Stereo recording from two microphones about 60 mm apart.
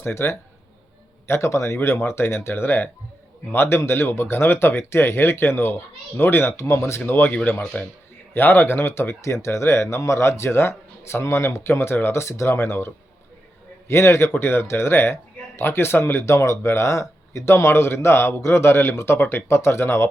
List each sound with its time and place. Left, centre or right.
0.1 s speech: left
7.0 s speech: left
7.3 s speech: left
8.3 s speech: left
16.3 s speech: left